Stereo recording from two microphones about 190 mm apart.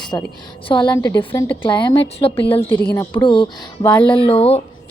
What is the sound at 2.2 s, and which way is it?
Speech, 30° left (ahead or behind).